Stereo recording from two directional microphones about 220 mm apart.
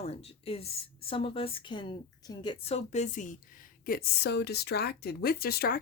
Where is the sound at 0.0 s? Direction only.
25° left (ahead or behind).